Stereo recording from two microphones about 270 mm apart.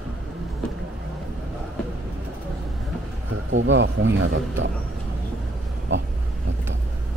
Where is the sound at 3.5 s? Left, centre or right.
Right.